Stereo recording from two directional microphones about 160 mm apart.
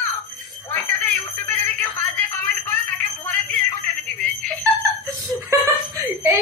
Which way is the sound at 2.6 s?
10° left (ahead or behind).